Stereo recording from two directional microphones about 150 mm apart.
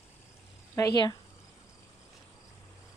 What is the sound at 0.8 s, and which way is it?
Speech, 25° left (ahead or behind).